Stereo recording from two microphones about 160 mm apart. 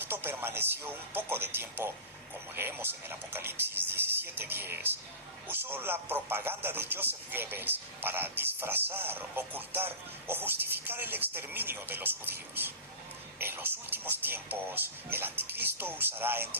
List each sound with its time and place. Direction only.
0.0 s a man's voice: 10° right (ahead or behind)